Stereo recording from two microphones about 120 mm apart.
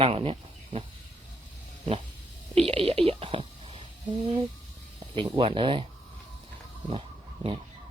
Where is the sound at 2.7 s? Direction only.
55° right (ahead or behind).